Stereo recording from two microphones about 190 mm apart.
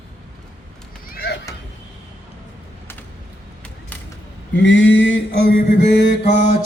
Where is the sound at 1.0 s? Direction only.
55° left (ahead or behind).